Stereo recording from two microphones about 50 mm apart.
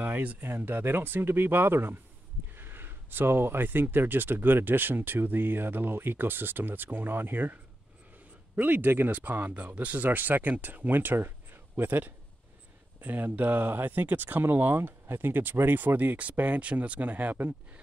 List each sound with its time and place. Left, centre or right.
0.0 s speech: right
0.5 s speech: right